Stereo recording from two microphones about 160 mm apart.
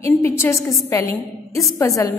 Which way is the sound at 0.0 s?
15° left (ahead or behind).